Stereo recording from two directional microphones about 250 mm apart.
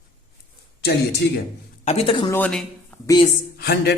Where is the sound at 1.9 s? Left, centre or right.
Left.